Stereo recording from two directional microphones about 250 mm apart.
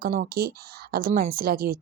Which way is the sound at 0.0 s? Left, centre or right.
Right.